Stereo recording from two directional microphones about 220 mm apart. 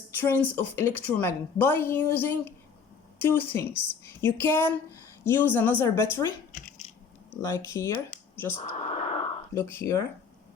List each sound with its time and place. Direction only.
0.1 s a woman's voice: 10° left (ahead or behind)
6.5 s squish: 35° left (ahead or behind)
7.4 s a woman's voice: 15° left (ahead or behind)
8.7 s a sound: 30° left (ahead or behind)
9.6 s a woman's voice: 10° left (ahead or behind)